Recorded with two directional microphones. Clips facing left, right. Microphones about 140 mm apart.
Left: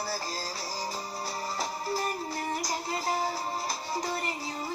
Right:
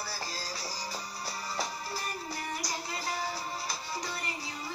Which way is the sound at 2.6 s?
45° left (ahead or behind).